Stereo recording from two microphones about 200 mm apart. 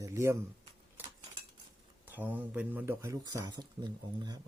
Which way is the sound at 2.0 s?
10° right (ahead or behind).